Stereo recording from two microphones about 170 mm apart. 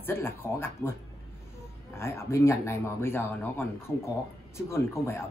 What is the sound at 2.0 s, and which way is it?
Speech, 15° left (ahead or behind).